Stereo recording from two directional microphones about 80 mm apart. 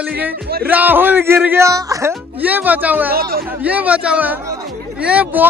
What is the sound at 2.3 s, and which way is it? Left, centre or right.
A man's voice, right.